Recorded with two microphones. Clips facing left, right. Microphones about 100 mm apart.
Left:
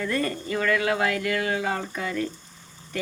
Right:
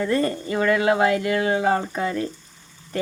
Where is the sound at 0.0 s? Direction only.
30° right (ahead or behind).